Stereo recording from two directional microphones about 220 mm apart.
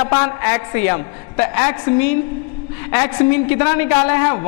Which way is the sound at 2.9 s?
20° left (ahead or behind).